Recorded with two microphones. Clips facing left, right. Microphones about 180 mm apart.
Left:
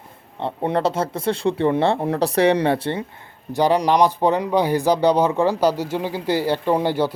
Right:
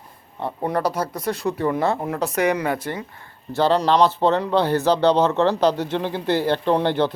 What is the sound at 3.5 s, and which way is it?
Speech, 15° left (ahead or behind).